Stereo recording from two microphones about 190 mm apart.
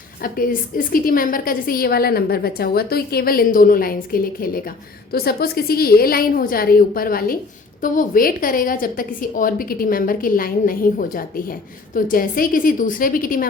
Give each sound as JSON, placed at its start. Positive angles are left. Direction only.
{"t": 0.2, "sound": "a woman's voice", "side_deg": 50}